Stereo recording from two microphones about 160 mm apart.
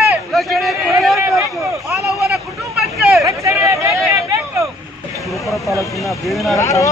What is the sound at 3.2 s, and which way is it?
Hubbub, 20° right (ahead or behind).